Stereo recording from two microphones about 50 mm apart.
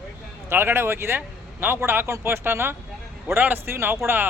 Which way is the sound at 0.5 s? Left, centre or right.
Right.